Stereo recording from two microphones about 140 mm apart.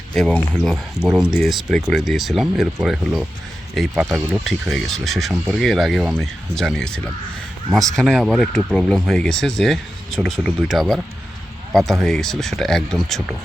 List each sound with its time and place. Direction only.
0.1 s speech: 5° left (ahead or behind)
4.4 s speech: centre (ahead or behind)